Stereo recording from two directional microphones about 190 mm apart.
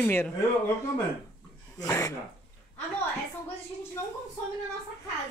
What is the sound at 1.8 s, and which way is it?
Speech, 15° left (ahead or behind).